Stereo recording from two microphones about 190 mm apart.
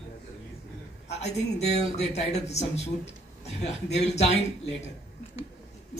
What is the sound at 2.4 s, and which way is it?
Speech, 35° left (ahead or behind).